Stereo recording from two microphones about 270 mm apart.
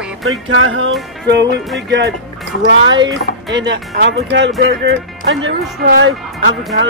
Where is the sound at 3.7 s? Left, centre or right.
Right.